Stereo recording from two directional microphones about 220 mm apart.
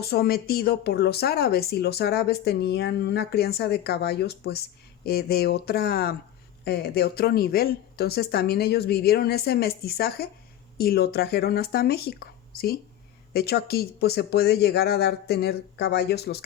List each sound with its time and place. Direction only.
0.0 s speech: 45° left (ahead or behind)